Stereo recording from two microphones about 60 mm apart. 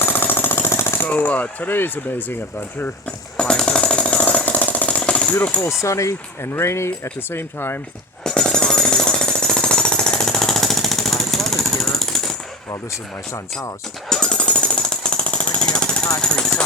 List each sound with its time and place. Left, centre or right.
0.0 s jackhammer: left
1.0 s speech: left
2.8 s jackhammer: centre
5.8 s speech: left
8.3 s jackhammer: centre
14.1 s jackhammer: centre